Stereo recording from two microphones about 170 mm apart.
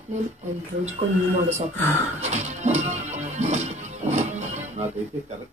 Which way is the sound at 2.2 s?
40° right (ahead or behind).